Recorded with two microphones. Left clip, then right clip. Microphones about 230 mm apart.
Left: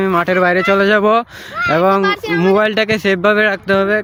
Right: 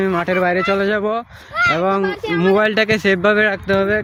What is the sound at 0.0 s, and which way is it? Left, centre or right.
Speech, left.